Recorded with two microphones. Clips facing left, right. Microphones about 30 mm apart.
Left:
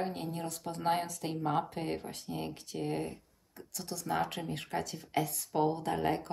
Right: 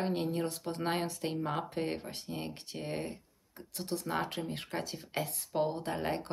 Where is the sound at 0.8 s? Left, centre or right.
Centre; by 4.0 s right.